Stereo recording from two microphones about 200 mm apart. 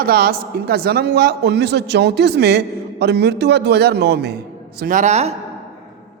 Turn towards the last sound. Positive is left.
turn(degrees=-35)  # may be behind; listen again after turning